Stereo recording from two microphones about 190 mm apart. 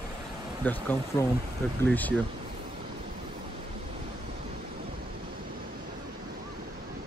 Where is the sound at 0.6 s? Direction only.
10° left (ahead or behind).